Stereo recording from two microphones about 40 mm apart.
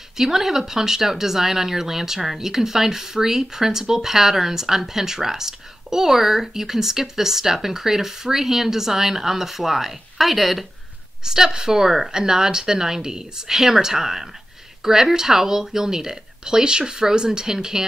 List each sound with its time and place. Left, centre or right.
0.2 s speech: centre
11.2 s speech: centre